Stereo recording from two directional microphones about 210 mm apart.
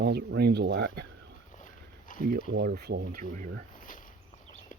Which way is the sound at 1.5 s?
40° left (ahead or behind).